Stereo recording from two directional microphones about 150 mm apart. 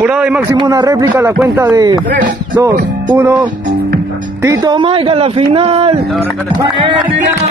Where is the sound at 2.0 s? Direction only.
65° right (ahead or behind).